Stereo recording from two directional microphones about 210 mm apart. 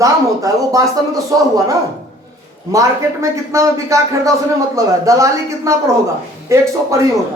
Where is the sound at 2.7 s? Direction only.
15° right (ahead or behind).